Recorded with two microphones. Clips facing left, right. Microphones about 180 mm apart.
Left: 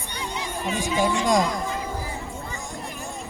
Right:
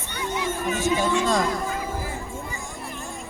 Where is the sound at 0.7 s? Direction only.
15° left (ahead or behind).